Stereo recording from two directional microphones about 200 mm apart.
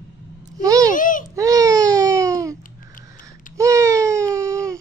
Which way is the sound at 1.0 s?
40° left (ahead or behind).